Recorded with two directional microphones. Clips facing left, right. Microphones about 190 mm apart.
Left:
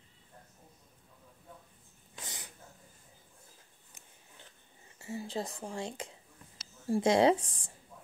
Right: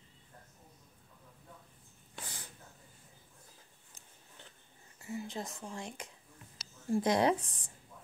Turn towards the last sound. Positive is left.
turn(degrees=30)  # may be behind; listen again after turning